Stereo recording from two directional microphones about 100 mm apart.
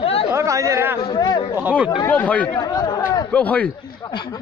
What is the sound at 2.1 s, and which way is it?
Speech, 15° left (ahead or behind).